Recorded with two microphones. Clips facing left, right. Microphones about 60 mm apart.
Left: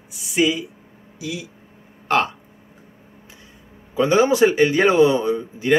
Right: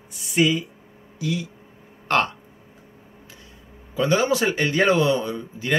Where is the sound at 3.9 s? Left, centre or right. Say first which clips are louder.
Left 5 dB; left.